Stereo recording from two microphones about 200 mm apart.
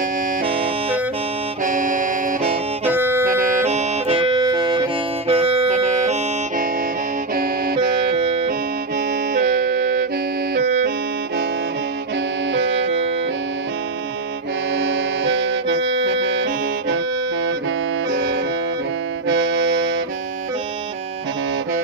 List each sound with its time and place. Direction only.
0.5 s music: 30° right (ahead or behind)
1.6 s music: 40° right (ahead or behind)
2.9 s music: 10° right (ahead or behind)
3.3 s music: 40° right (ahead or behind)
7.3 s music: 50° right (ahead or behind)
12.5 s music: 65° right (ahead or behind)
14.8 s music: 60° right (ahead or behind)
19.2 s music: 65° right (ahead or behind)